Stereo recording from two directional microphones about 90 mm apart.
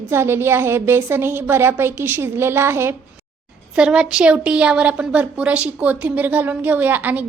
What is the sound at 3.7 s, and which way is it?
A woman's voice, 10° right (ahead or behind).